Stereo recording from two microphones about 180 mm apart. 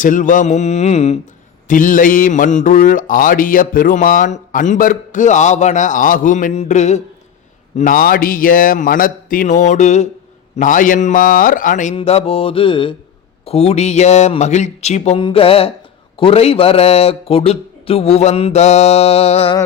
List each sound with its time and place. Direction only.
0.0 s a man's voice: 45° left (ahead or behind)
1.6 s mantra: 50° left (ahead or behind)
11.9 s a man's voice: 35° left (ahead or behind)